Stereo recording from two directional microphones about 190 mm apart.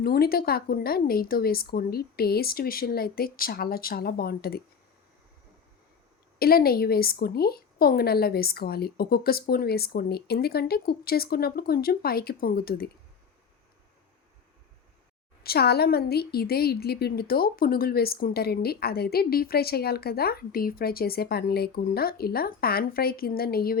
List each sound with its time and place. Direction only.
0.0 s a woman's voice: 55° left (ahead or behind)
6.4 s a woman's voice: 55° left (ahead or behind)
15.4 s a woman's voice: 55° left (ahead or behind)